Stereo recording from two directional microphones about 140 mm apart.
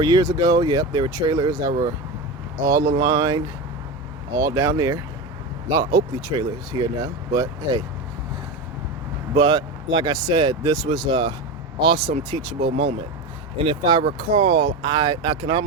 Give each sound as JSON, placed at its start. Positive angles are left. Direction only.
{"t": 0.0, "sound": "speech", "side_deg": -30}
{"t": 9.3, "sound": "speech", "side_deg": -35}